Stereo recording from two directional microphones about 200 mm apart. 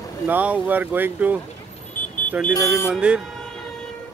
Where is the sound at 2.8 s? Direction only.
5° right (ahead or behind).